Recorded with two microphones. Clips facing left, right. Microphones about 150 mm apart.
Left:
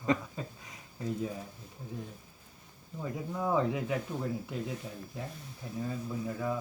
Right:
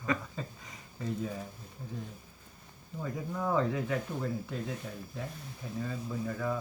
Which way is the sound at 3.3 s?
15° left (ahead or behind).